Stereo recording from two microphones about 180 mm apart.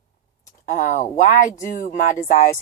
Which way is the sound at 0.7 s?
45° left (ahead or behind).